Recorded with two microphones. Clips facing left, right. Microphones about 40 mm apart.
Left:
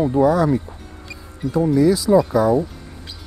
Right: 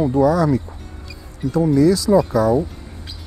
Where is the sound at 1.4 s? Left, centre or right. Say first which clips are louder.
Right 1 dB; centre.